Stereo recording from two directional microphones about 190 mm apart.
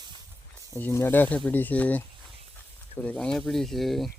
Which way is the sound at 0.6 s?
15° left (ahead or behind).